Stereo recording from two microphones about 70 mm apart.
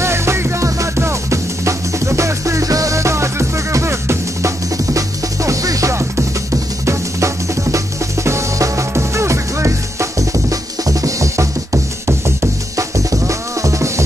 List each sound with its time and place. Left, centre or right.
0.0 s music: right